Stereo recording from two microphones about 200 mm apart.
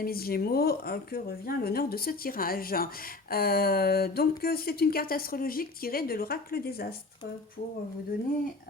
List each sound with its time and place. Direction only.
0.0 s speech: 50° left (ahead or behind)